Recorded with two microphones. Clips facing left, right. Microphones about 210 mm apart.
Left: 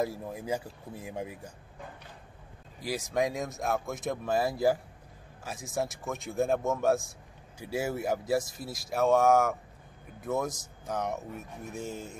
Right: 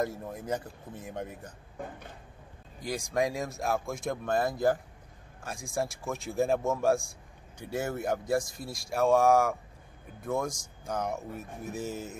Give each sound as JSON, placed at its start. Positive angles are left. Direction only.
{"t": 0.0, "sound": "speech", "side_deg": 5}
{"t": 1.8, "sound": "a sound", "side_deg": -50}
{"t": 2.8, "sound": "speech", "side_deg": 5}